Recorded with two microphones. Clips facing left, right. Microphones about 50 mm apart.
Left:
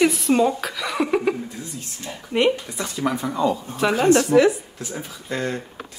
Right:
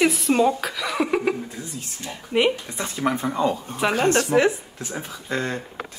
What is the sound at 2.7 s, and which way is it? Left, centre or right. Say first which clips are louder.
Speech: even; right.